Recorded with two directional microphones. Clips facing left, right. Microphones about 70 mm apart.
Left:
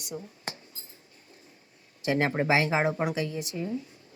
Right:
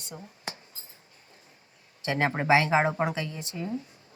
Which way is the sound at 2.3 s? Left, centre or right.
Right.